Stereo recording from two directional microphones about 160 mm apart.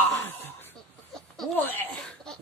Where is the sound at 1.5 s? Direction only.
10° left (ahead or behind).